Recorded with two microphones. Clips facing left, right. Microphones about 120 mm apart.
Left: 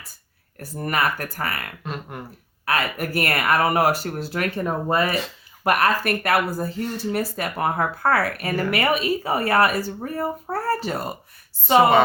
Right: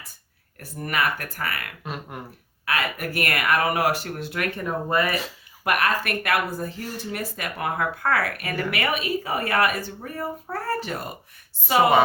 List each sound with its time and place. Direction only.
0.6 s speech: 35° left (ahead or behind)
1.8 s a sound: 5° right (ahead or behind)
2.6 s speech: 40° left (ahead or behind)